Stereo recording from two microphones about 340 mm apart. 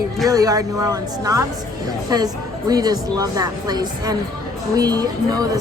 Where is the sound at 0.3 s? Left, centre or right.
Centre.